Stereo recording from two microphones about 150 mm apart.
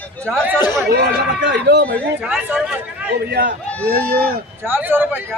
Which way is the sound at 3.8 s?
90° right.